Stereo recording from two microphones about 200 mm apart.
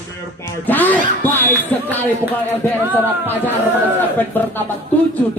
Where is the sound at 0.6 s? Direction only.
10° left (ahead or behind).